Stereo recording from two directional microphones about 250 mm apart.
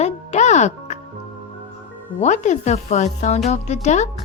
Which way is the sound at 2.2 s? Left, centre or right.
Left.